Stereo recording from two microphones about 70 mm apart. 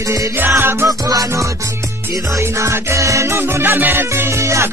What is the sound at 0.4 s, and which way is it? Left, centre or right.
Music, right.